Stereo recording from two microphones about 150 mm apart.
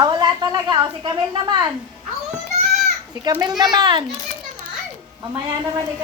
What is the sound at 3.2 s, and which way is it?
Speech, 25° right (ahead or behind).